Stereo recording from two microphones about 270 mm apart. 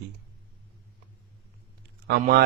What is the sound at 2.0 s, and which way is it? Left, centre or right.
Speech, right.